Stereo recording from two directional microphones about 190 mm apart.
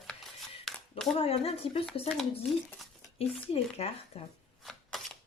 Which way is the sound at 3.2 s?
30° left (ahead or behind).